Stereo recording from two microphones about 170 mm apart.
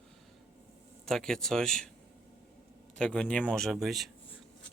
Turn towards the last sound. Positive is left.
turn(degrees=0)  # may be behind; listen again after turning